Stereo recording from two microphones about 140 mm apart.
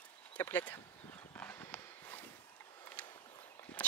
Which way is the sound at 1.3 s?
15° left (ahead or behind).